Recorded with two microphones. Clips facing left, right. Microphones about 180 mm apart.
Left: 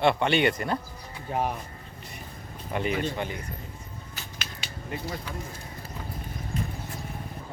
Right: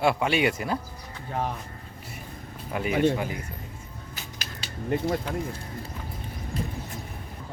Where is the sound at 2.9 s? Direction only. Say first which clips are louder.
Right 7 dB; 60° right (ahead or behind).